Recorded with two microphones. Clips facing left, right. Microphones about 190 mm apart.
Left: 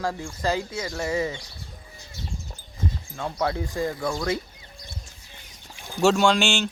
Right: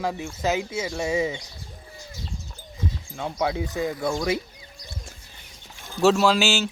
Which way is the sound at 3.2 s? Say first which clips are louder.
Right 1 dB; 15° right (ahead or behind).